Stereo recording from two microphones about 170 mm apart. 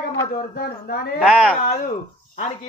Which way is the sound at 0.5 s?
65° left (ahead or behind).